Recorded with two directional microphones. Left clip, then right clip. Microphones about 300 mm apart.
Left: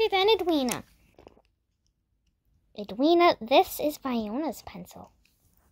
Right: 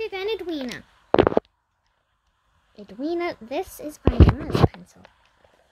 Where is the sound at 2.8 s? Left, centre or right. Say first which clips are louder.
Left 6 dB; centre.